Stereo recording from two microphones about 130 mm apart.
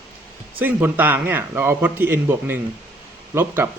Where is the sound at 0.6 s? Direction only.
15° right (ahead or behind).